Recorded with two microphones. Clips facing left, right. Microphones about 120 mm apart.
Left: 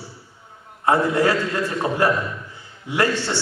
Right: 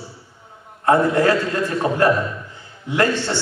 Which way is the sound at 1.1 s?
15° left (ahead or behind).